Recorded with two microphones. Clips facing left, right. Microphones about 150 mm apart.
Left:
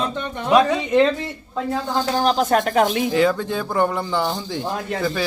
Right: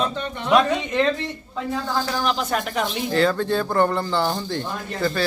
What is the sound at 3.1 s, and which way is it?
Speech, 10° left (ahead or behind).